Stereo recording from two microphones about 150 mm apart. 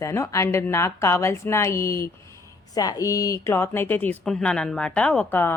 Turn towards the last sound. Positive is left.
turn(degrees=15)  # may be behind; listen again after turning